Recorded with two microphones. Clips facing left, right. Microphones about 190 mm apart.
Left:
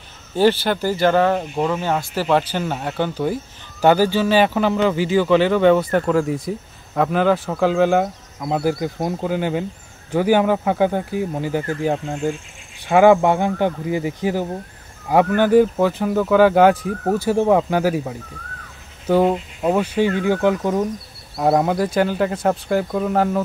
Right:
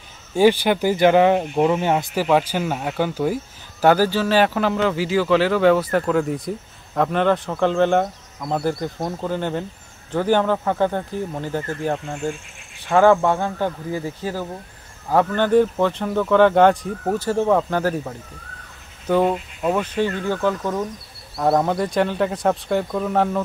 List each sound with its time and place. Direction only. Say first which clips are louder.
0.3 s speech: right 1 dB; 10° right (ahead or behind)
2.1 s speech: left 2 dB; 10° right (ahead or behind)
8.9 s speech: left 3 dB; 20° left (ahead or behind)
9.2 s speech: left 2 dB; 5° left (ahead or behind)
20.9 s speech: left 5 dB; centre (ahead or behind)